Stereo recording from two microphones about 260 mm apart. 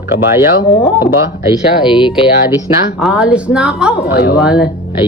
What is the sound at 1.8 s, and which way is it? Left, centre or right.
Speech, centre.